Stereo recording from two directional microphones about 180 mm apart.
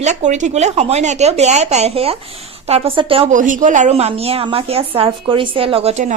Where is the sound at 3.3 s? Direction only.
45° right (ahead or behind).